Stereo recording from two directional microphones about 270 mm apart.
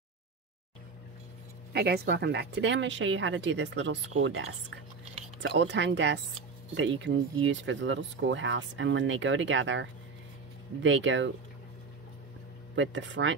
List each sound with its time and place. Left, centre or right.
1.7 s speech: right
12.7 s speech: right